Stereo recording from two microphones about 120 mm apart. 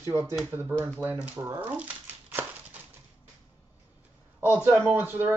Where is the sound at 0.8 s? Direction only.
15° right (ahead or behind).